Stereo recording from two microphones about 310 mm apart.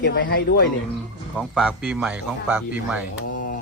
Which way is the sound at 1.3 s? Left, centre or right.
Centre.